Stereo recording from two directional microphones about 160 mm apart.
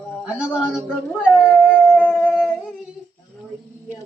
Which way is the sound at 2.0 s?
5° left (ahead or behind).